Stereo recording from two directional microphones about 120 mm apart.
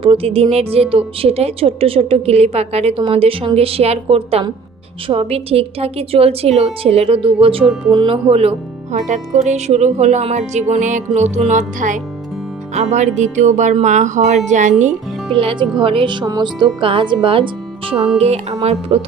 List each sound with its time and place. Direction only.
0.0 s a woman's voice: 50° right (ahead or behind)
7.6 s speech: centre (ahead or behind)
7.9 s speech: 40° right (ahead or behind)
8.3 s speech: 55° right (ahead or behind); by 11.9 s 90° right
12.7 s speech: 70° right (ahead or behind)
15.3 s speech: 45° right (ahead or behind)
16.8 s a woman's voice: 45° right (ahead or behind)